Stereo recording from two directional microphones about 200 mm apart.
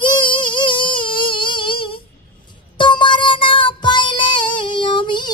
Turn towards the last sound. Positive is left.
turn(degrees=25)  # may be behind; listen again after turning